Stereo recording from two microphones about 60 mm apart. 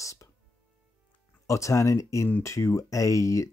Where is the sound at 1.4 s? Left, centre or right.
Left.